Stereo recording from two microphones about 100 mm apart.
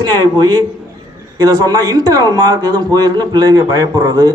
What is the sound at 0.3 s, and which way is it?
Speech, 45° right (ahead or behind).